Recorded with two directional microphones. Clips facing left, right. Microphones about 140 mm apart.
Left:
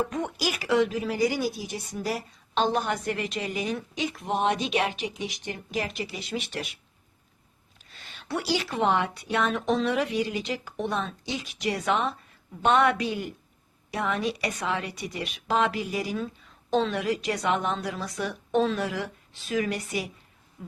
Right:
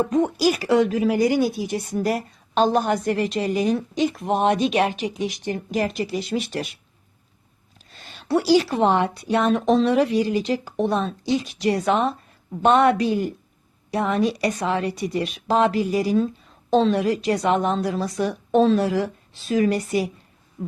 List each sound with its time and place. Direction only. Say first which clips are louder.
0.1 s a woman's voice: right 10 dB; 35° right (ahead or behind)
7.9 s a woman's voice: right 9 dB; 35° right (ahead or behind)